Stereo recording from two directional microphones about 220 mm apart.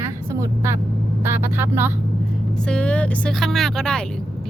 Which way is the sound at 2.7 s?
5° left (ahead or behind).